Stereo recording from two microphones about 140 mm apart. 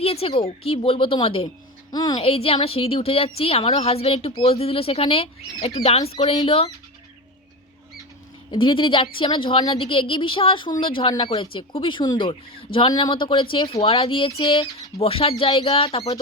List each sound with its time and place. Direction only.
0.0 s a woman's voice: 45° left (ahead or behind)
1.9 s a woman's voice: 30° left (ahead or behind)
2.2 s a woman's voice: 45° left (ahead or behind)
8.4 s a woman's voice: 40° left (ahead or behind)